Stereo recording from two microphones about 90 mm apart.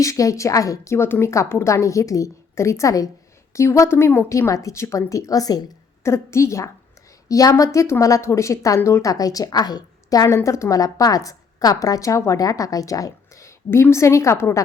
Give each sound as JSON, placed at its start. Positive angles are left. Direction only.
{"t": 0.0, "sound": "a woman's voice", "side_deg": 35}
{"t": 6.0, "sound": "a woman's voice", "side_deg": 30}